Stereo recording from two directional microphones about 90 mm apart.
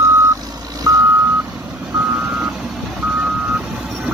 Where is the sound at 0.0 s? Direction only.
30° right (ahead or behind).